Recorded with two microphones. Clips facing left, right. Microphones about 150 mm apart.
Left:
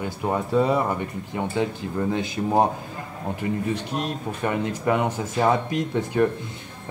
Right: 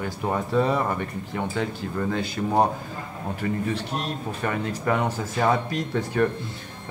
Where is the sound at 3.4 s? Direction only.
20° left (ahead or behind).